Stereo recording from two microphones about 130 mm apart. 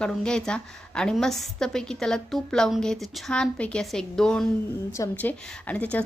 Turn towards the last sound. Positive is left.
turn(degrees=10)  # may be behind; listen again after turning